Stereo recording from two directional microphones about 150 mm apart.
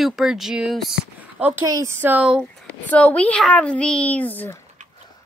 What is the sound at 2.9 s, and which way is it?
A woman's voice, 10° left (ahead or behind).